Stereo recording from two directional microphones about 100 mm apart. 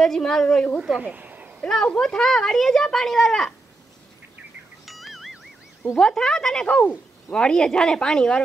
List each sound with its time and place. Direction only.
0.0 s speech: 5° left (ahead or behind)
0.7 s speech: 5° right (ahead or behind)
1.0 s a sound: 15° right (ahead or behind)
1.6 s speech: 10° left (ahead or behind)
4.8 s music: centre (ahead or behind)
5.9 s speech: 5° left (ahead or behind)